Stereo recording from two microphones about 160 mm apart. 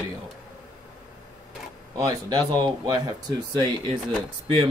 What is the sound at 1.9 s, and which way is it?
Speech, 25° right (ahead or behind).